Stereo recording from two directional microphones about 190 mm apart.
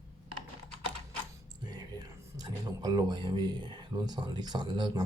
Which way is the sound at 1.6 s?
20° right (ahead or behind).